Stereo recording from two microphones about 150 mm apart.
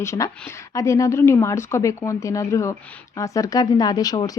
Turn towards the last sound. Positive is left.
turn(degrees=25)  # may be behind; listen again after turning